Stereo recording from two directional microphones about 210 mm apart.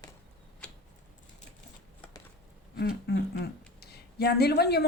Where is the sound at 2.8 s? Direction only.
50° left (ahead or behind).